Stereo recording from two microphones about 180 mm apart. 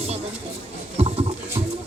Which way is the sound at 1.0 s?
35° right (ahead or behind).